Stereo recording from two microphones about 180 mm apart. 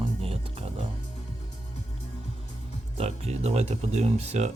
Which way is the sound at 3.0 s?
35° right (ahead or behind).